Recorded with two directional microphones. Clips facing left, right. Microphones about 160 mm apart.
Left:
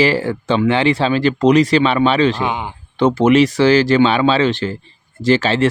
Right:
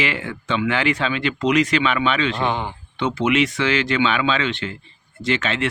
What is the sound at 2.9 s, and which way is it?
Speech, 40° left (ahead or behind).